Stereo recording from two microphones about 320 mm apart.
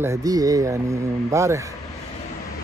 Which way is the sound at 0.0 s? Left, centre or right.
Centre.